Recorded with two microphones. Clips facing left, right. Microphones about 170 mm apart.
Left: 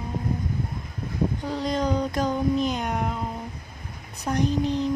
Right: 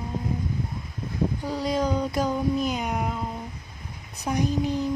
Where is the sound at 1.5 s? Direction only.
10° right (ahead or behind).